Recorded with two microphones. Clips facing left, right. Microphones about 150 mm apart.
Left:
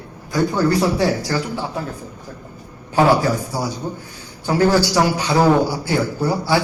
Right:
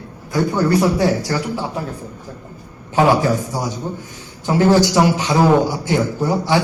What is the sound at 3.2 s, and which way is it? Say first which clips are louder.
Speech: right 2 dB; 20° right (ahead or behind).